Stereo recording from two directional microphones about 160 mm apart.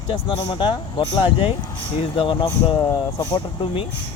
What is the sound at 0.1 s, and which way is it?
Speech, 30° left (ahead or behind).